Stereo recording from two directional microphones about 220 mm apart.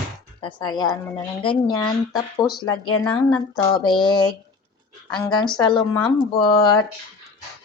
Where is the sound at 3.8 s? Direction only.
20° left (ahead or behind).